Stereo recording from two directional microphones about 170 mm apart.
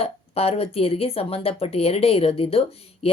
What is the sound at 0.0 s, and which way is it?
A woman's voice, 35° left (ahead or behind).